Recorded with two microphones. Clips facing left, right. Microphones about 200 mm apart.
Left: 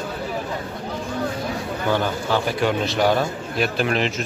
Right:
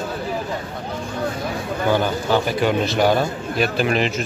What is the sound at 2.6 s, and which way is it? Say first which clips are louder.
Speech: right 2 dB; centre (ahead or behind).